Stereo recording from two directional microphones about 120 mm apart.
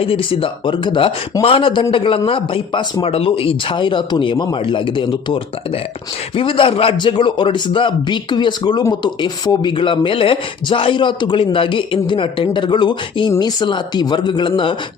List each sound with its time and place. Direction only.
0.0 s speech: 50° left (ahead or behind)